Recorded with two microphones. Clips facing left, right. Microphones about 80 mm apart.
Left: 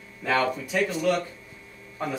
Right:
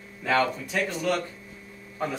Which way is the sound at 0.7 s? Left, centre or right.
Centre.